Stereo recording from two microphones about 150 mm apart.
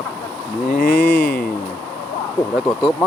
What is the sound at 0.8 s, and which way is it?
Speech, 90° left.